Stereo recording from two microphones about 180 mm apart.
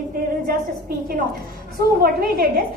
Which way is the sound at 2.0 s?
55° right (ahead or behind).